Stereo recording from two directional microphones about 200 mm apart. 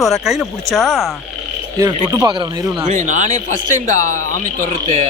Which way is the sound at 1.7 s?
15° right (ahead or behind).